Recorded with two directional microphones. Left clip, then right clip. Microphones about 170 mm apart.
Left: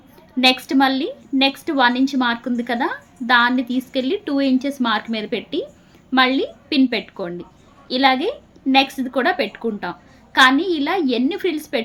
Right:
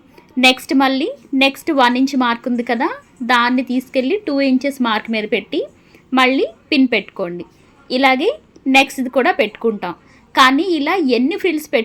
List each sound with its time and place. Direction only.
0.3 s a woman's voice: 20° right (ahead or behind)